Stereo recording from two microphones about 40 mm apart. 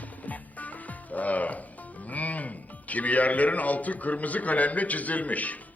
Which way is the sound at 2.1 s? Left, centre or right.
Left.